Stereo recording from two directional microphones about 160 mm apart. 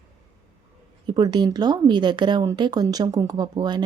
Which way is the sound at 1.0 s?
25° right (ahead or behind).